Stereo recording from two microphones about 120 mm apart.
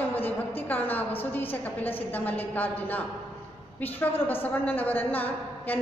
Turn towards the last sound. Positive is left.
turn(degrees=15)  # may be behind; listen again after turning